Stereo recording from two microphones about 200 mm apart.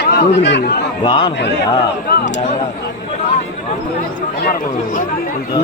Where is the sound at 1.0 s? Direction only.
25° left (ahead or behind).